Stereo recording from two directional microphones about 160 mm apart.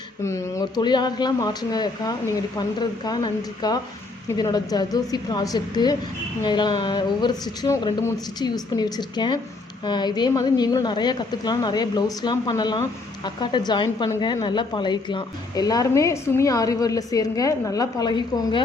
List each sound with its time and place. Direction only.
0.3 s a woman's voice: 20° left (ahead or behind)